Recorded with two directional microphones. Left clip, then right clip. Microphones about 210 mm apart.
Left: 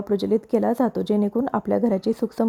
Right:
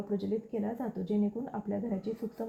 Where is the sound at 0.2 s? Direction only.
40° left (ahead or behind).